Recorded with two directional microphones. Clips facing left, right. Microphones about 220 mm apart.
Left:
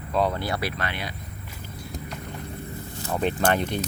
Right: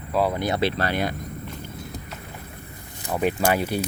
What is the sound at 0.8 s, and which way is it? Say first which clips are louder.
Speech: right 7 dB; 45° right (ahead or behind).